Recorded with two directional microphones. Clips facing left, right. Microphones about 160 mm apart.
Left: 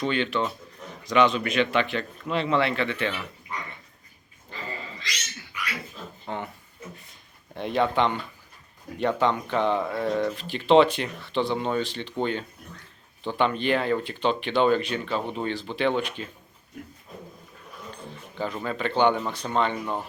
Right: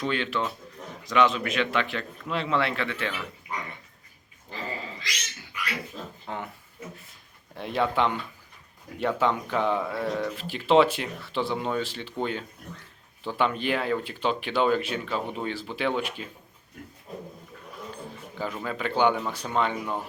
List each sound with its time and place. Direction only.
0.0 s speech: centre (ahead or behind)
6.2 s speech: centre (ahead or behind)
6.9 s a sound: 5° right (ahead or behind)
9.0 s speech: 5° right (ahead or behind)
18.3 s speech: 5° right (ahead or behind)